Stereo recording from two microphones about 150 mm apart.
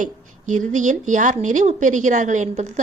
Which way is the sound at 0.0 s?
60° right (ahead or behind).